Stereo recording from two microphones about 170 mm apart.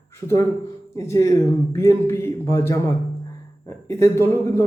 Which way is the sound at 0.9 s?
20° left (ahead or behind).